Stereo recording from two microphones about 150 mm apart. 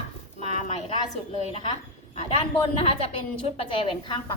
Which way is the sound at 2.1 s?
40° left (ahead or behind).